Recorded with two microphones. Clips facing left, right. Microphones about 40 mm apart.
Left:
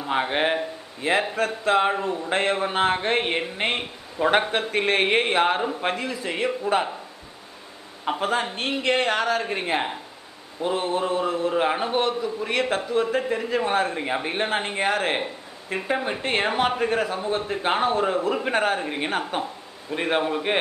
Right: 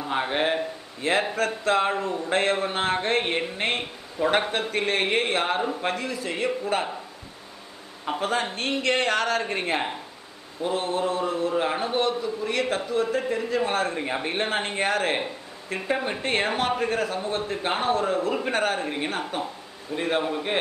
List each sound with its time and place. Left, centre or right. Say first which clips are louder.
0.0 s a man's voice: left 2 dB; centre
8.1 s a man's voice: left 2 dB; centre
10.6 s a man's voice: left 1 dB; centre
11.4 s a man's voice: left 2 dB; left
15.7 s a man's voice: left 2 dB; centre
16.1 s a man's voice: left 1 dB; centre